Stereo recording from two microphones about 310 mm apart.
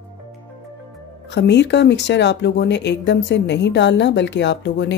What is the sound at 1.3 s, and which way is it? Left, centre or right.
Speech, left.